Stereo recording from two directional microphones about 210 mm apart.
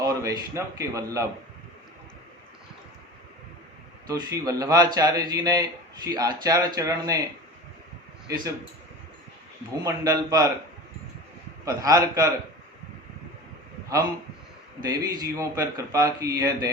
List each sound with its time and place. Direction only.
0.0 s a man's voice: 15° right (ahead or behind)
4.0 s speech: 15° right (ahead or behind)
9.8 s speech: 15° right (ahead or behind)
11.6 s speech: 15° right (ahead or behind)
14.8 s speech: 15° right (ahead or behind)